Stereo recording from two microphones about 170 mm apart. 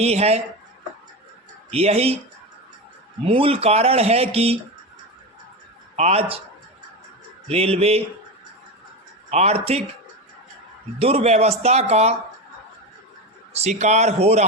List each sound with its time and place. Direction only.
0.0 s speech: 40° right (ahead or behind)
1.7 s speech: 35° right (ahead or behind)
3.2 s speech: 35° right (ahead or behind)
6.0 s speech: 35° right (ahead or behind)
7.4 s speech: 35° right (ahead or behind)
9.3 s speech: 40° right (ahead or behind)
11.0 s speech: 40° right (ahead or behind)
13.5 s speech: 40° right (ahead or behind)